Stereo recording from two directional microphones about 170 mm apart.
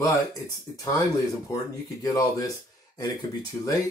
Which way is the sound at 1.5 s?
20° left (ahead or behind).